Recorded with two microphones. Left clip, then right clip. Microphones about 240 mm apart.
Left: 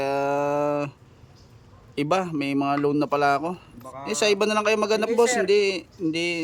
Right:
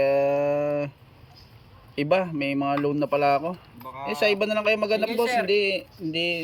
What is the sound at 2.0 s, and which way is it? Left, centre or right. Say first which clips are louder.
A man's voice: right 1 dB; centre.